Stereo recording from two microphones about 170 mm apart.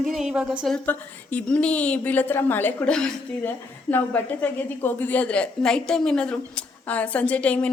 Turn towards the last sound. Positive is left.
turn(degrees=10)  # may be behind; listen again after turning